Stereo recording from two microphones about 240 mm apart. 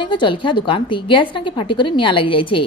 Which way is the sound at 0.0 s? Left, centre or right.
Centre.